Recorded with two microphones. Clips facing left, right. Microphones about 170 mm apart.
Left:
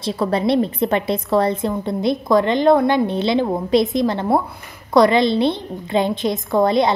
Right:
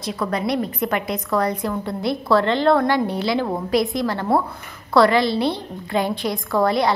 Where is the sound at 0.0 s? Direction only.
30° left (ahead or behind).